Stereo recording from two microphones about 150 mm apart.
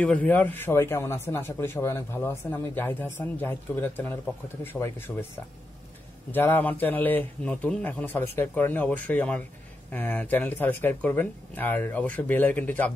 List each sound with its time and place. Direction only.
0.0 s a man's voice: 10° left (ahead or behind)
6.3 s a man's voice: 15° left (ahead or behind)